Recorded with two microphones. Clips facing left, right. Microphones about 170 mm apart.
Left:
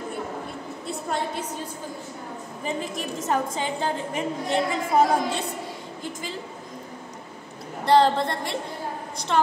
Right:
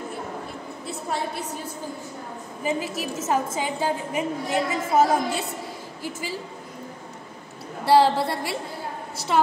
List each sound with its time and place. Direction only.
2.6 s a woman's voice: 5° right (ahead or behind)
7.8 s a woman's voice: 10° right (ahead or behind)